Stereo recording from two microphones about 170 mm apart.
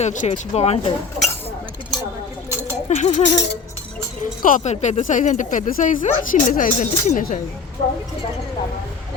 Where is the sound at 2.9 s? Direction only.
40° left (ahead or behind).